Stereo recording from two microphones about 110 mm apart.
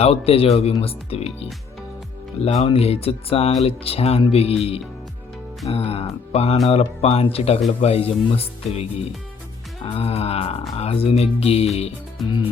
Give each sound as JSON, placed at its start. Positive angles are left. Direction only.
{"t": 0.0, "sound": "speech", "side_deg": 65}
{"t": 2.4, "sound": "music", "side_deg": 80}
{"t": 2.6, "sound": "speech", "side_deg": 65}
{"t": 5.6, "sound": "speech", "side_deg": 65}
{"t": 6.3, "sound": "music", "side_deg": 75}
{"t": 6.7, "sound": "speech", "side_deg": 65}
{"t": 7.7, "sound": "music", "side_deg": 65}
{"t": 9.8, "sound": "speech", "side_deg": 60}
{"t": 11.2, "sound": "music", "side_deg": 65}